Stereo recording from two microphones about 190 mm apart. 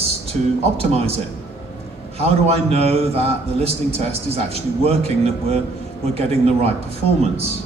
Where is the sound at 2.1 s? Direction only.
30° right (ahead or behind).